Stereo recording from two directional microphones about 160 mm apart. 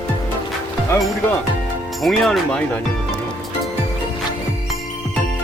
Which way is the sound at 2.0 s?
Centre (ahead or behind).